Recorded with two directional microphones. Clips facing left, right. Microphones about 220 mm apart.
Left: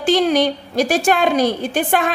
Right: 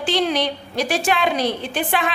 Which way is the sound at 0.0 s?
45° left (ahead or behind).